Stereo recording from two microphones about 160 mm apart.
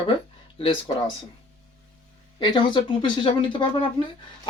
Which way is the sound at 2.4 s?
30° left (ahead or behind).